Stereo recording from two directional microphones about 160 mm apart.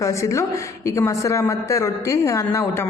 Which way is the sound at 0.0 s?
20° left (ahead or behind).